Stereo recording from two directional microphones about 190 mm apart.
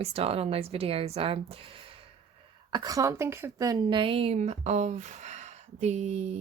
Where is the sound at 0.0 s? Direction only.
30° right (ahead or behind).